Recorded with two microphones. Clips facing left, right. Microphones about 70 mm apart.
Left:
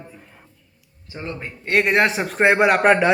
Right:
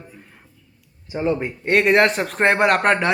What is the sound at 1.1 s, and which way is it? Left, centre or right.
Speech, centre.